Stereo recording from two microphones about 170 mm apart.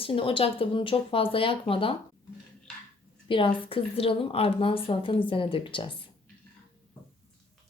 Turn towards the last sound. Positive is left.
turn(degrees=30)  # may be behind; listen again after turning